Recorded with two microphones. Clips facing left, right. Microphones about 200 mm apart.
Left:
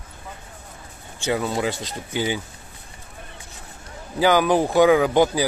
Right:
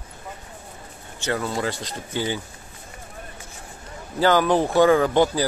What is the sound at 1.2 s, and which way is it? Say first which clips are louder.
Speech: left 2 dB; 15° left (ahead or behind).